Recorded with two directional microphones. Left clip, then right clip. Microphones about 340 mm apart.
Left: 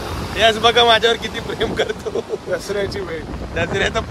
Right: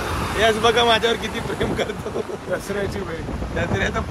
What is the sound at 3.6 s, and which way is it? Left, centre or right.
Speech, left.